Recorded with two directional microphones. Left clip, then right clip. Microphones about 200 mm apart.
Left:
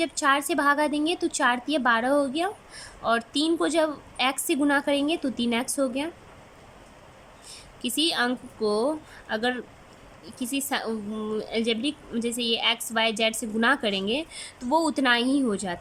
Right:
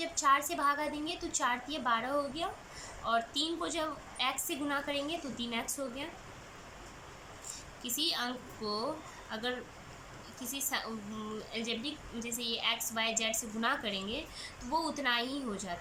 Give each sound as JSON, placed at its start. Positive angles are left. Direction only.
{"t": 0.0, "sound": "a woman's voice", "side_deg": 50}
{"t": 7.8, "sound": "a woman's voice", "side_deg": 45}